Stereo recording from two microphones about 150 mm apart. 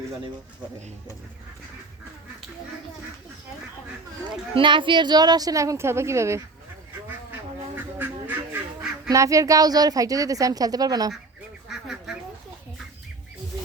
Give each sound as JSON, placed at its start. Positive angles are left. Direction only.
{"t": 4.5, "sound": "a woman's voice", "side_deg": -35}
{"t": 7.8, "sound": "duck", "side_deg": -15}
{"t": 9.0, "sound": "a woman's voice", "side_deg": -20}
{"t": 11.7, "sound": "duck", "side_deg": -5}